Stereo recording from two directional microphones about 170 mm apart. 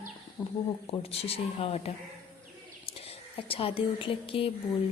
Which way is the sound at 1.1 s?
35° left (ahead or behind).